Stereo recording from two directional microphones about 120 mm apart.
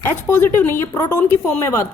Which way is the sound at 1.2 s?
15° left (ahead or behind).